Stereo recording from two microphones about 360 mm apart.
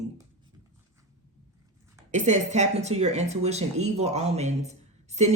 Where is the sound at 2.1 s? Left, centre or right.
Centre.